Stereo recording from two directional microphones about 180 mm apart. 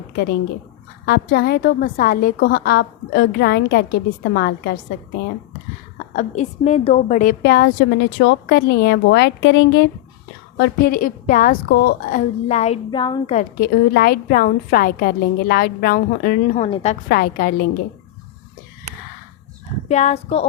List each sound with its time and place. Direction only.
1.0 s a woman's voice: 60° left (ahead or behind)
6.1 s a woman's voice: 40° left (ahead or behind)
7.4 s a woman's voice: 65° left (ahead or behind)
10.6 s a woman's voice: 55° left (ahead or behind)
12.5 s a woman's voice: 40° left (ahead or behind)
12.9 s speech: 25° left (ahead or behind)
13.6 s a woman's voice: 60° left (ahead or behind)
16.6 s a woman's voice: 35° left (ahead or behind)
17.1 s a woman's voice: 55° left (ahead or behind)
19.9 s a woman's voice: 40° left (ahead or behind)